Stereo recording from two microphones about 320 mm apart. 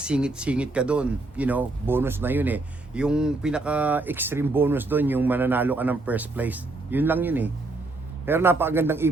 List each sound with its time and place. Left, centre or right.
0.0 s a man's voice: centre